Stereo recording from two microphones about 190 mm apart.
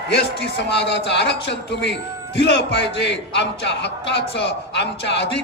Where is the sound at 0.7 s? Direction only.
65° left (ahead or behind).